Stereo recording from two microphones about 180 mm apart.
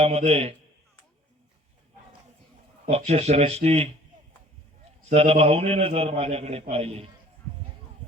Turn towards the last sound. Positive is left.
turn(degrees=-35)  # may be behind; listen again after turning